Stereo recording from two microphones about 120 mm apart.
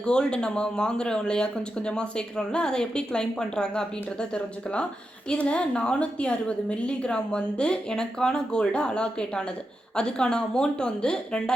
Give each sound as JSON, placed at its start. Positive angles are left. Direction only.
{"t": 0.0, "sound": "speech", "side_deg": 10}